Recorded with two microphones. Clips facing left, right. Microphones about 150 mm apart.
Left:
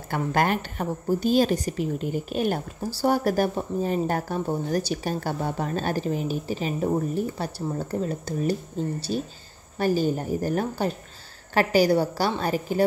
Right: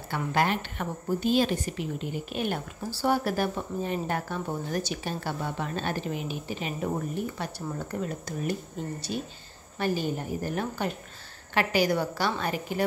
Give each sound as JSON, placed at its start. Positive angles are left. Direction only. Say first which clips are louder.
{"t": 0.1, "sound": "a woman's voice", "louder": "left 3 dB", "side_deg": 45}